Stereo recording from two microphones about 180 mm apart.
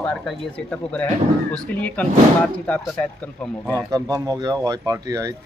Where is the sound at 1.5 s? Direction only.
5° left (ahead or behind).